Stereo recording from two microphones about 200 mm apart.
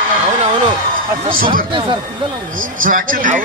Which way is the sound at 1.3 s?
45° right (ahead or behind).